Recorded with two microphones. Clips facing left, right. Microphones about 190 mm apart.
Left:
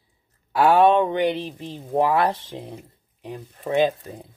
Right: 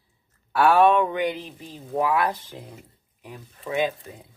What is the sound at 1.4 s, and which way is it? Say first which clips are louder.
Speech: left 7 dB; 75° left (ahead or behind).